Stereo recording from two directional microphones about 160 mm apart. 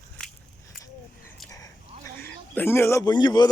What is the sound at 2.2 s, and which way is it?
Speech, 15° left (ahead or behind).